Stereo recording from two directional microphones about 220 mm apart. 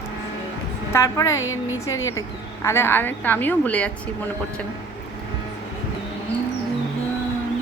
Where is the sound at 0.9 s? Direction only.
15° left (ahead or behind).